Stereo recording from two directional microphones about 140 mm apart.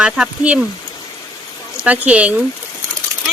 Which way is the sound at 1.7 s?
10° right (ahead or behind).